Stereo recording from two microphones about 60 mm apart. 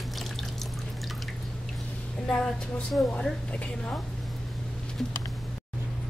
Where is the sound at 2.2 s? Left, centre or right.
Centre.